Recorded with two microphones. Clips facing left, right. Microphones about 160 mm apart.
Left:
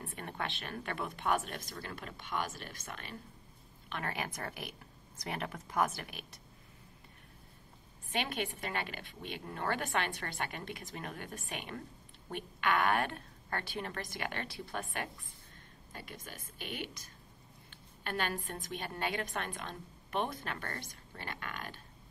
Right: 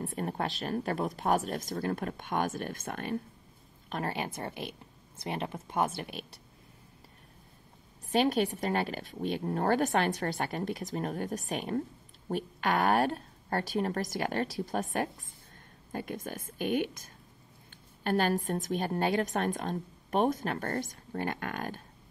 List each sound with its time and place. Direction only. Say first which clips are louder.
0.0 s a woman's voice: right 7 dB; 35° right (ahead or behind)
3.9 s speech: right 5 dB; 30° right (ahead or behind)
8.1 s a woman's voice: right 10 dB; 40° right (ahead or behind)